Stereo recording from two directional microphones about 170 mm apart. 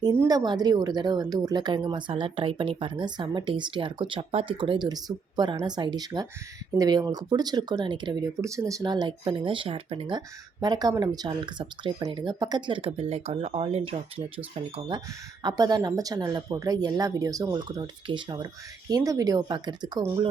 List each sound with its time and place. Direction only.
0.0 s a woman's voice: 20° right (ahead or behind); by 13.9 s 35° right (ahead or behind)
15.4 s a woman's voice: 25° right (ahead or behind)